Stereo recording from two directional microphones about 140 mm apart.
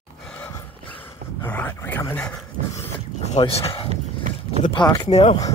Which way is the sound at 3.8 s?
55° right (ahead or behind).